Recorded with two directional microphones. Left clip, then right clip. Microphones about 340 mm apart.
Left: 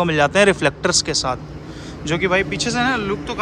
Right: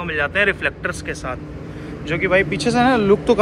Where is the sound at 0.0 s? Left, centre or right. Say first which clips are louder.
Left 4 dB; centre.